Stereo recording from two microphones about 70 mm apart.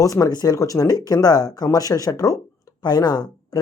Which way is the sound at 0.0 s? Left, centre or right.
Left.